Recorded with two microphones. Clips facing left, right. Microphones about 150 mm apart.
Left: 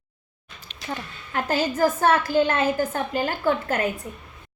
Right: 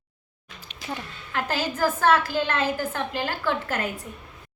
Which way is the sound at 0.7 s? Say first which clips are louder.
Even; 10° right (ahead or behind).